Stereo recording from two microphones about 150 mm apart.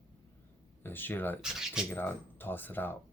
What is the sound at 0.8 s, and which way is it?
Speech, 15° left (ahead or behind).